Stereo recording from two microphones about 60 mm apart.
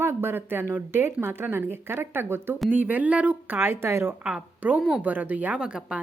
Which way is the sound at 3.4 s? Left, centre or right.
Right.